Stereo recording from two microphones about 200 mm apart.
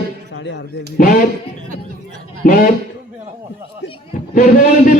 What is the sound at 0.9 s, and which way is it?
Speech, 40° left (ahead or behind).